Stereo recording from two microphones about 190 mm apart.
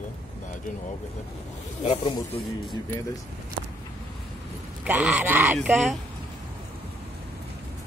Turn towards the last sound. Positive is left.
turn(degrees=0)  # may be behind; listen again after turning